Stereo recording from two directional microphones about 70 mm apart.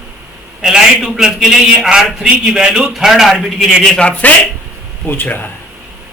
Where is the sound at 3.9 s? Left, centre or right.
Centre.